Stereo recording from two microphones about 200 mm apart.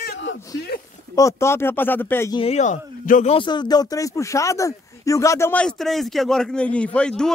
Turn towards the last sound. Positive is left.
turn(degrees=5)  # may be behind; listen again after turning